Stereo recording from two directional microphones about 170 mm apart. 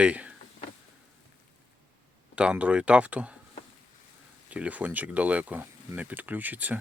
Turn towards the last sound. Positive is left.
turn(degrees=-10)  # may be behind; listen again after turning